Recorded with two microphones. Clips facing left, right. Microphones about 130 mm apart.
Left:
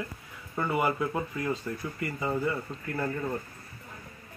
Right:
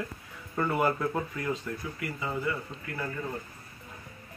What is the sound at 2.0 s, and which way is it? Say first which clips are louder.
Speech: left 4 dB; 30° left (ahead or behind).